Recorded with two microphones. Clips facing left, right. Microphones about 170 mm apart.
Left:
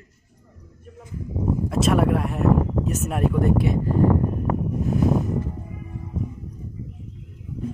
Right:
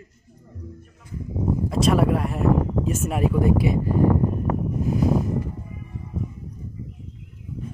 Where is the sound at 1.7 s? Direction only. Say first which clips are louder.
Even; centre (ahead or behind).